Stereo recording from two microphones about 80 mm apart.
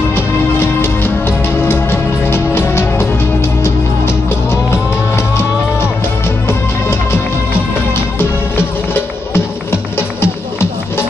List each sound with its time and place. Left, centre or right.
0.1 s music: left